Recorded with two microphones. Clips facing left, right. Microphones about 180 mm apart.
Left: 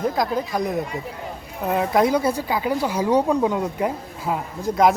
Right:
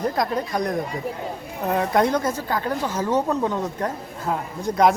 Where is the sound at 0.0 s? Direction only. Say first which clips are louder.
Left 1 dB; centre (ahead or behind).